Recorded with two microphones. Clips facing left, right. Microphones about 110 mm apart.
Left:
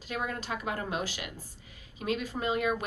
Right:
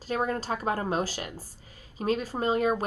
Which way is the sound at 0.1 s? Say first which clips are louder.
Right 6 dB; 35° right (ahead or behind).